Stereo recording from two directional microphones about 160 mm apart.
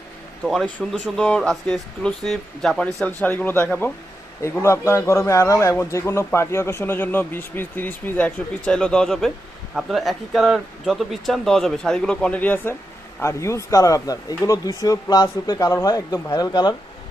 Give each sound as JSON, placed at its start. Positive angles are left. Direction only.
{"t": 0.4, "sound": "a man's voice", "side_deg": -5}